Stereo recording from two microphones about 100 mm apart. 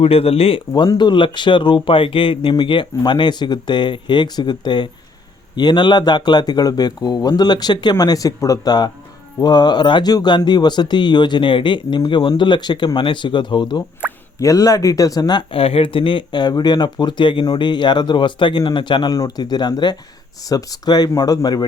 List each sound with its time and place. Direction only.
0.0 s speech: 80° left
0.9 s speech: 50° left (ahead or behind)
14.0 s plop: 15° right (ahead or behind)
14.3 s speech: 35° left (ahead or behind)
15.5 s speech: 70° left (ahead or behind); by 21.7 s 45° left (ahead or behind)